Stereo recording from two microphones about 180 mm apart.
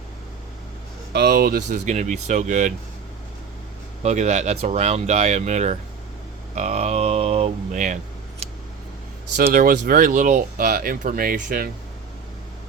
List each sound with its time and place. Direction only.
1.1 s speech: 60° right (ahead or behind); by 2.7 s 40° right (ahead or behind)
4.0 s speech: 40° right (ahead or behind)
9.3 s speech: 50° right (ahead or behind)